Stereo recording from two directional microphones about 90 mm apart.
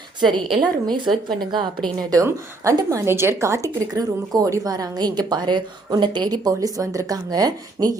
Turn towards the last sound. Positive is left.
turn(degrees=-45)  # may be behind; listen again after turning